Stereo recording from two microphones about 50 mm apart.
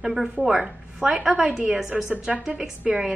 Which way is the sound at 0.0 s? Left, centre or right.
Centre.